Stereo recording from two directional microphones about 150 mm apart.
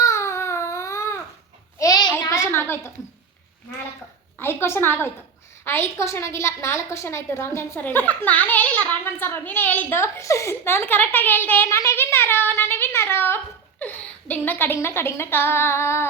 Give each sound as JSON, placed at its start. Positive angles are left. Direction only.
{"t": 0.0, "sound": "baby cry", "side_deg": 20}
{"t": 1.8, "sound": "a sound", "side_deg": 25}
{"t": 4.4, "sound": "a woman's voice", "side_deg": 15}